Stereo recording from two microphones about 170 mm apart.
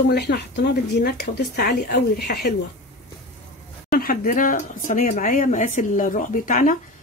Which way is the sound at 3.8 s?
60° left (ahead or behind).